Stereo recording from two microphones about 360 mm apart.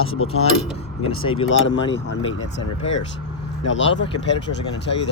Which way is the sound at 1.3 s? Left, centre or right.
Left.